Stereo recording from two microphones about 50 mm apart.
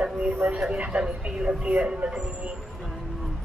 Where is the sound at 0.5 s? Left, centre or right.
Centre.